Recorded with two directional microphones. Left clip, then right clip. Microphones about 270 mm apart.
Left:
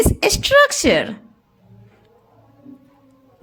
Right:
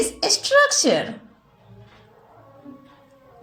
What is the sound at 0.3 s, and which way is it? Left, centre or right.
Speech, left.